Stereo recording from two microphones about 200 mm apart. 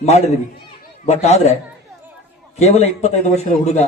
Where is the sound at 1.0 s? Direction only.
35° left (ahead or behind).